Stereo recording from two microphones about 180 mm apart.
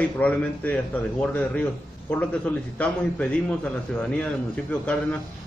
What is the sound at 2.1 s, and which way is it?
A man's voice, 10° left (ahead or behind).